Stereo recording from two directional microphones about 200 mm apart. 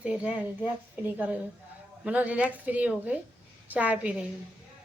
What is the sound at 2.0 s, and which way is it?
A woman's voice, 5° right (ahead or behind).